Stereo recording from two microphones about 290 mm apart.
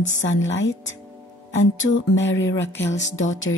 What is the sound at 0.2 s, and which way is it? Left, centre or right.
Speech, left.